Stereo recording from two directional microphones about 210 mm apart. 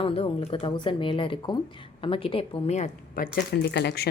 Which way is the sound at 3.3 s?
50° left (ahead or behind).